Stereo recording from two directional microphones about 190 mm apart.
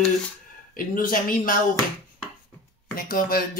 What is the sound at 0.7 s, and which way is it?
Speech, 45° left (ahead or behind).